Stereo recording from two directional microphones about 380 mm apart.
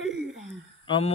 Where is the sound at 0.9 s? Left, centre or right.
Centre.